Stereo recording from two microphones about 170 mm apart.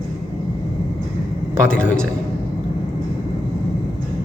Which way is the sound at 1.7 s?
5° left (ahead or behind).